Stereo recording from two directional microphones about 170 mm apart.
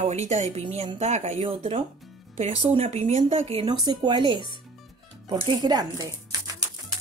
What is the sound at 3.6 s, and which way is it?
Speech, 25° right (ahead or behind).